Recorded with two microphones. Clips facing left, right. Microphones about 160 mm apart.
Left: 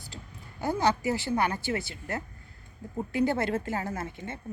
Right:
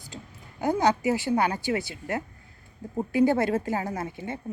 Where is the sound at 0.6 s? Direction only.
15° right (ahead or behind).